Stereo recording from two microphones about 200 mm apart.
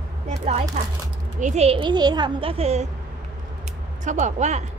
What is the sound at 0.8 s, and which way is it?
A woman's voice, 35° right (ahead or behind).